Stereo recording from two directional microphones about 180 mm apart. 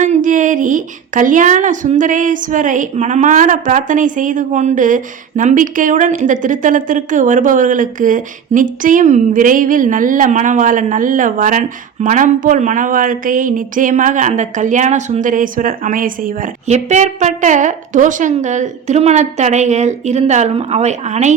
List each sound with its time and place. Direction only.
0.0 s a woman's voice: 45° right (ahead or behind)